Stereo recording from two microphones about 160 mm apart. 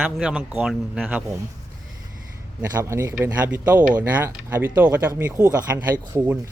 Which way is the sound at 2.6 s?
15° right (ahead or behind).